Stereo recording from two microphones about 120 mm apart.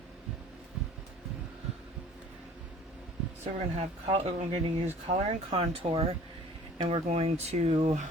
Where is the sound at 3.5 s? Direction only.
65° right (ahead or behind).